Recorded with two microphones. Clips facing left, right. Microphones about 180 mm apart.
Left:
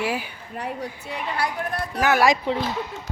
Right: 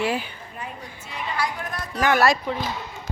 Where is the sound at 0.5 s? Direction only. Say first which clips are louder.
Left 8 dB; 70° left (ahead or behind).